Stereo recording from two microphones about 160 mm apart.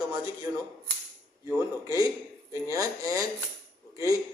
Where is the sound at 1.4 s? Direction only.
20° right (ahead or behind).